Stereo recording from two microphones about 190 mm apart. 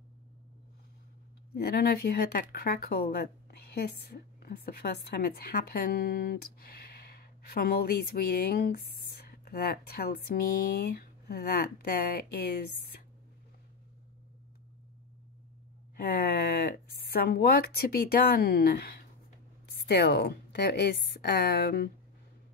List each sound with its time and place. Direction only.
1.5 s a woman's voice: 55° left (ahead or behind)
16.0 s a woman's voice: 55° left (ahead or behind)